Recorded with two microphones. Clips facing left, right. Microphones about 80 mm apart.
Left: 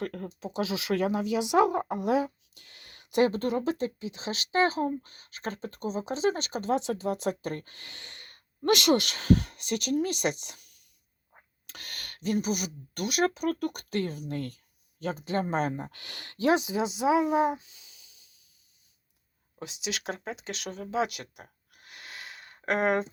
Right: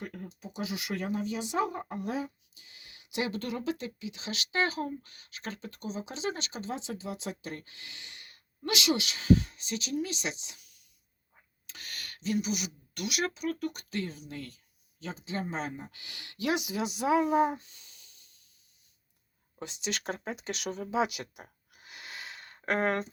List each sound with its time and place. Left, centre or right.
0.0 s speech: left
0.3 s speech: left; by 18.3 s centre
19.5 s speech: centre
22.6 s speech: centre